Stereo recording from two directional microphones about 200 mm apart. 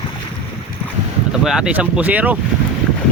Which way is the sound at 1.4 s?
5° right (ahead or behind).